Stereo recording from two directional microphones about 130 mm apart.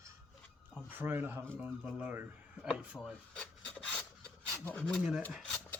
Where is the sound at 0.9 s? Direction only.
15° right (ahead or behind).